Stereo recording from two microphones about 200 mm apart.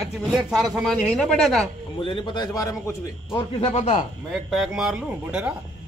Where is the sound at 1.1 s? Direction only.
Centre (ahead or behind).